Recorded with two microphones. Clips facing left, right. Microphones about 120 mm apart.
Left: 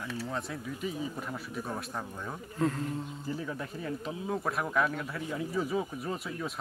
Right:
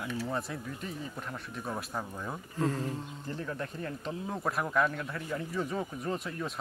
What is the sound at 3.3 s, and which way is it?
Speech, 5° left (ahead or behind).